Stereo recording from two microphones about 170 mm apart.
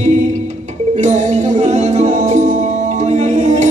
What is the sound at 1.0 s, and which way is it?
Music, 45° right (ahead or behind).